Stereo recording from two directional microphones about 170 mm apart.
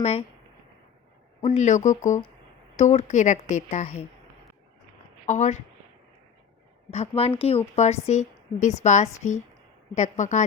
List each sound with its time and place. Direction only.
0.0 s a woman's voice: 35° left (ahead or behind)
1.4 s a woman's voice: 45° left (ahead or behind)
5.2 s speech: 45° left (ahead or behind)
6.9 s a woman's voice: 35° left (ahead or behind)